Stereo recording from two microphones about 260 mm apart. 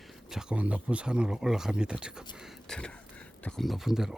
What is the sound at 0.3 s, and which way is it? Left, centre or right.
Speech, centre.